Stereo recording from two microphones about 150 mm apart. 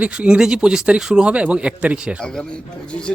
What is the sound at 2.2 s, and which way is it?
Speech, 5° left (ahead or behind).